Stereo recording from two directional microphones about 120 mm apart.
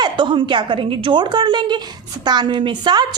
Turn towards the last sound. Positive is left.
turn(degrees=-35)  # may be behind; listen again after turning